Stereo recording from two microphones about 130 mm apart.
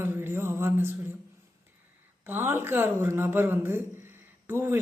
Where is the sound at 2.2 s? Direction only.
15° right (ahead or behind).